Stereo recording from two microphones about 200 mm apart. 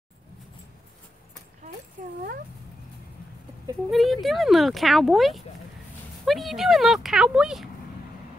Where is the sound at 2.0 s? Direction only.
35° right (ahead or behind).